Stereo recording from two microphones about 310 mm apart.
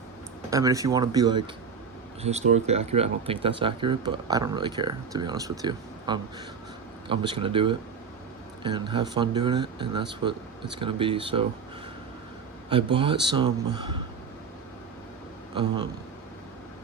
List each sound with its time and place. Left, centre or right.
0.5 s speech: centre
12.7 s speech: centre
15.5 s speech: centre